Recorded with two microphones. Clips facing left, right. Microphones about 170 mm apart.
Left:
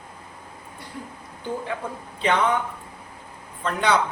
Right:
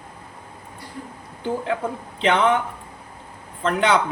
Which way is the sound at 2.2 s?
90° right.